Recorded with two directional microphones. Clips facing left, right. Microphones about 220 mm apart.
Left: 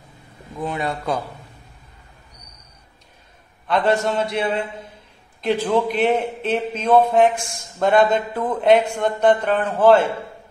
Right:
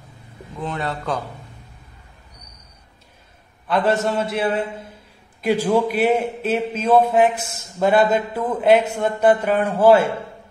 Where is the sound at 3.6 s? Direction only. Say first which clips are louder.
Even; centre (ahead or behind).